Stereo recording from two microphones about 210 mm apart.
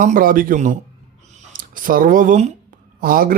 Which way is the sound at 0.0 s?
40° right (ahead or behind).